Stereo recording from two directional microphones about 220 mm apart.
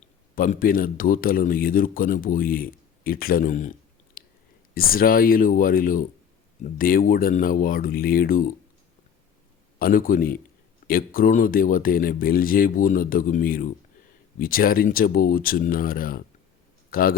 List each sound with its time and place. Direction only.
0.0 s speech: 35° left (ahead or behind)
9.7 s speech: 40° left (ahead or behind)